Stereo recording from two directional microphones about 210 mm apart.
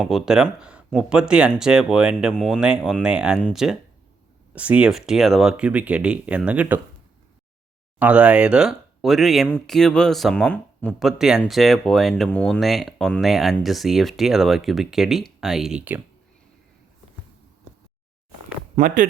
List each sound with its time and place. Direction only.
0.0 s speech: centre (ahead or behind)
7.9 s speech: 5° right (ahead or behind)
18.8 s speech: 40° right (ahead or behind)